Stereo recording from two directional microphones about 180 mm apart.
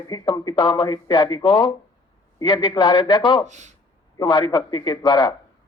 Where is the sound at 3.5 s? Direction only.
40° right (ahead or behind).